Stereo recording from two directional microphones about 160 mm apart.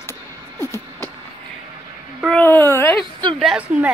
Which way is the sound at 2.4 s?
15° left (ahead or behind).